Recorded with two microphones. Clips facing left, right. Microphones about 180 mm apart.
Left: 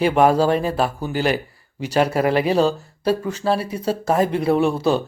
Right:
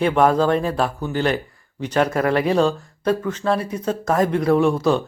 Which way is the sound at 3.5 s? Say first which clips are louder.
Even; 30° left (ahead or behind).